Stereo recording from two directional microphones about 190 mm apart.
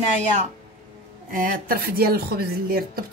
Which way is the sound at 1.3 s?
50° right (ahead or behind).